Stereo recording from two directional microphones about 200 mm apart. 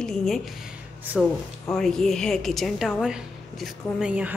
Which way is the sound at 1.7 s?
Centre (ahead or behind).